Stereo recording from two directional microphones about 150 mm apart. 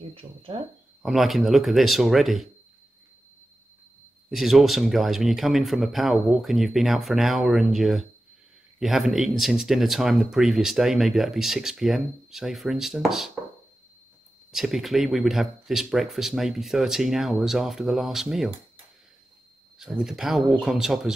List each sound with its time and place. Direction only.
0.1 s speech: 35° right (ahead or behind)
1.0 s speech: centre (ahead or behind)
4.3 s speech: centre (ahead or behind)
14.5 s speech: centre (ahead or behind)
19.8 s speech: 5° right (ahead or behind)